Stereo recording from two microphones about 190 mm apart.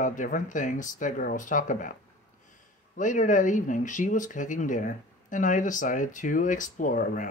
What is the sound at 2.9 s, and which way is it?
Speech, 40° left (ahead or behind).